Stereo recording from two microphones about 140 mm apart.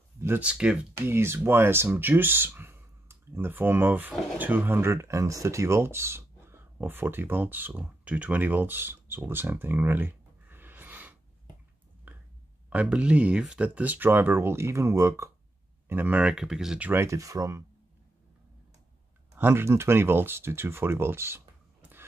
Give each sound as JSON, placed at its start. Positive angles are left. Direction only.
{"t": 0.2, "sound": "speech", "side_deg": -10}
{"t": 12.6, "sound": "speech", "side_deg": -10}
{"t": 19.3, "sound": "speech", "side_deg": -15}